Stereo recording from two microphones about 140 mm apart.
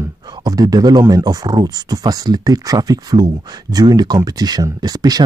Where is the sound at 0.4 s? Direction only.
25° right (ahead or behind).